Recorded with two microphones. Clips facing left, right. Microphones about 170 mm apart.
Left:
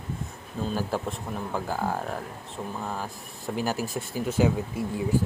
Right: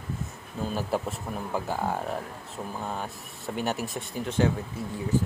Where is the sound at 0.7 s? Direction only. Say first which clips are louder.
Even; centre (ahead or behind).